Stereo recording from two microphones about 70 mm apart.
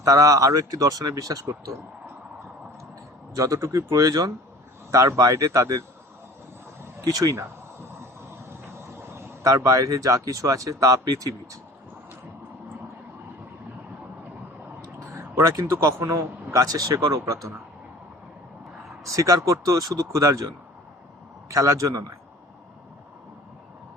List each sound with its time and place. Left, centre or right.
0.0 s speech: right
3.3 s speech: right
7.1 s speech: right
8.4 s speech: right
15.1 s a sound: right
16.0 s speech: right
19.0 s speech: right
21.5 s speech: right